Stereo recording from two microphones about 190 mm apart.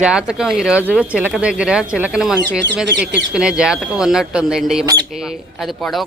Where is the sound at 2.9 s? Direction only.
70° right (ahead or behind).